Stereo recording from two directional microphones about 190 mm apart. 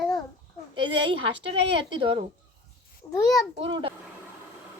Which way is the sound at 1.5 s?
30° right (ahead or behind).